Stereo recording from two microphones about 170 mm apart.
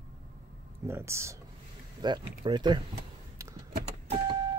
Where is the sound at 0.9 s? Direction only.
15° right (ahead or behind).